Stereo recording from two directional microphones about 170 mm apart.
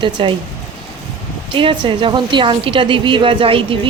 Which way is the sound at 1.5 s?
30° right (ahead or behind).